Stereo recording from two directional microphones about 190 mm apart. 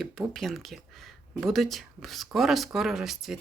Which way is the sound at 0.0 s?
Centre (ahead or behind).